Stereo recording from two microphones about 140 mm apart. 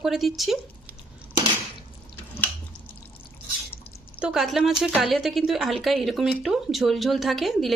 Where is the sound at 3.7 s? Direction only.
15° left (ahead or behind).